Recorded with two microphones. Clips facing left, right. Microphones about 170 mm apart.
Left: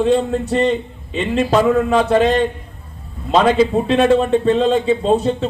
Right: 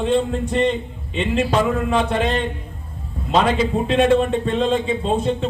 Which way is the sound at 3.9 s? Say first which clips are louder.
Left 3 dB; 40° left (ahead or behind).